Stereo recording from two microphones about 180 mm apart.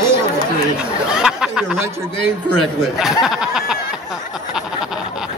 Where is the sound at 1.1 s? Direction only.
5° right (ahead or behind).